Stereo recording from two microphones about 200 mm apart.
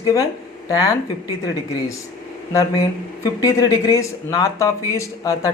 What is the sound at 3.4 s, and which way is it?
Speech, 20° left (ahead or behind).